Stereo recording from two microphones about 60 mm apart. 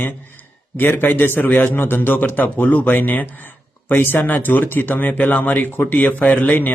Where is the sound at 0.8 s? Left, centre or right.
Left.